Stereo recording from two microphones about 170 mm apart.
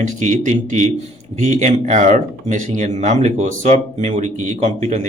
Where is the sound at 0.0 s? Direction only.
45° right (ahead or behind).